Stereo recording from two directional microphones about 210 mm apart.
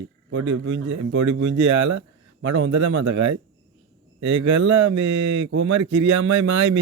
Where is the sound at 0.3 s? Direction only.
65° right (ahead or behind).